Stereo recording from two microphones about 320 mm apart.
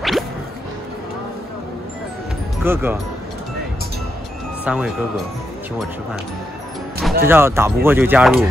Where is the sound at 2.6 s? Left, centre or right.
Centre.